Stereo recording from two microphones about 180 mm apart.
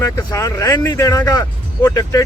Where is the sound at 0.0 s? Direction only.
15° left (ahead or behind).